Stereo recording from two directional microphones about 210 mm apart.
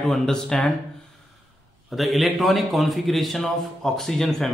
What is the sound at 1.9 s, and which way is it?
A man's voice, centre (ahead or behind).